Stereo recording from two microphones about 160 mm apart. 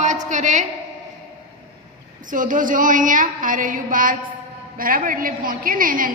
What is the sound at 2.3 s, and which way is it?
A woman's voice, 55° right (ahead or behind).